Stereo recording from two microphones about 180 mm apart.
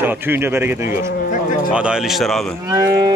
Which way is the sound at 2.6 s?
15° right (ahead or behind).